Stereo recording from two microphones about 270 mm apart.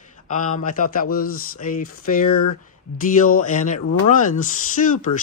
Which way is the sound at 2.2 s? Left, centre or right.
Left.